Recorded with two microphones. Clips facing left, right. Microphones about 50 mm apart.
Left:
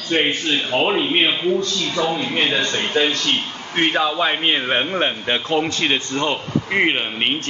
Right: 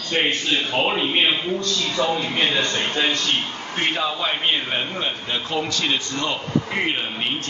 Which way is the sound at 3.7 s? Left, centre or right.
Left.